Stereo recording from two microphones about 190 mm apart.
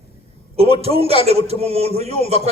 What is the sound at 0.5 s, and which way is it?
A man's voice, 30° right (ahead or behind).